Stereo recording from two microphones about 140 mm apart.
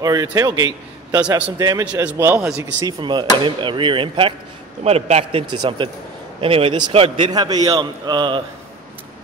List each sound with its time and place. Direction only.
0.0 s a man's voice: 25° right (ahead or behind)
2.0 s a man's voice: 15° right (ahead or behind); by 4.3 s 40° right (ahead or behind)
4.8 s a man's voice: 50° right (ahead or behind)
5.6 s a man's voice: 35° right (ahead or behind)
7.3 s a man's voice: 30° right (ahead or behind)